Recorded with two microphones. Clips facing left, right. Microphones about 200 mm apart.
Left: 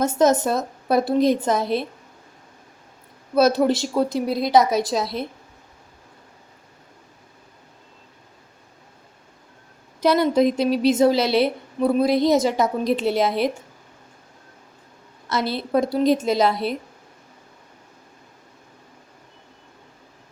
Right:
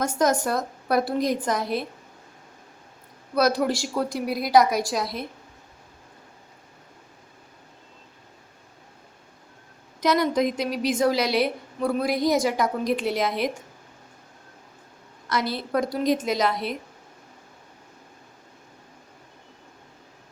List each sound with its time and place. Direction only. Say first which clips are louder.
0.0 s a woman's voice: left 5 dB; 25° left (ahead or behind)
3.3 s a woman's voice: left 5 dB; 25° left (ahead or behind)
10.0 s a woman's voice: left 4 dB; 30° left (ahead or behind)
15.3 s a woman's voice: left 3 dB; 25° left (ahead or behind)